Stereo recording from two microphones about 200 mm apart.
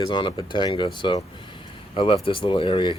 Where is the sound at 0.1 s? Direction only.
25° left (ahead or behind).